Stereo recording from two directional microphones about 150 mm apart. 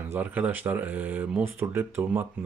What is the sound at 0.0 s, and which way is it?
Speech, 15° right (ahead or behind).